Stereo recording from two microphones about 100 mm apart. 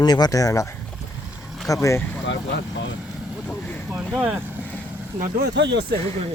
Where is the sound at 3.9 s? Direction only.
15° right (ahead or behind).